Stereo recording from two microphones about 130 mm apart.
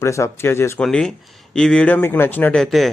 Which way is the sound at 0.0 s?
20° left (ahead or behind).